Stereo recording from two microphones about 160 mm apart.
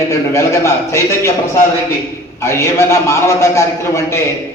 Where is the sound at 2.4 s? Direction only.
15° left (ahead or behind).